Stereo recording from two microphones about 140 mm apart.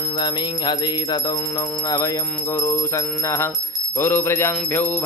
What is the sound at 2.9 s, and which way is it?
Music, 20° left (ahead or behind).